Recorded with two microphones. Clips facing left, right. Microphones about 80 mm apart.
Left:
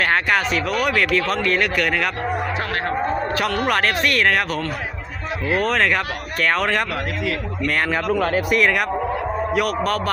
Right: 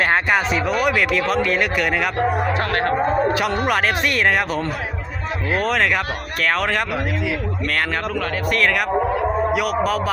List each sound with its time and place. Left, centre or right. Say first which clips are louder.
0.0 s speech: right 1 dB; centre
2.5 s speech: right 4 dB; right
3.2 s speech: right 3 dB; centre
5.5 s speech: even; centre
8.1 s speech: left 4 dB; left
8.4 s speech: left 1 dB; centre
8.9 s a sound: right 3 dB; centre